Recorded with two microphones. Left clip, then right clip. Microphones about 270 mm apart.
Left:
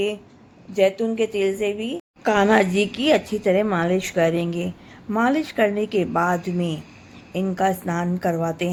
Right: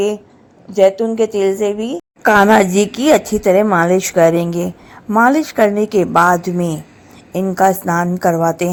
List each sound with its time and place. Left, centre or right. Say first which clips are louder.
0.7 s a woman's voice: right 8 dB; centre